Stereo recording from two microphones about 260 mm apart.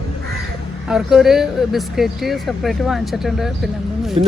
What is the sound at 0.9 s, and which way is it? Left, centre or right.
Speech, centre.